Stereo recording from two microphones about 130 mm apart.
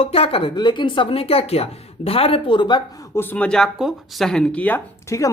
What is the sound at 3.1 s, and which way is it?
A man's voice, 15° left (ahead or behind).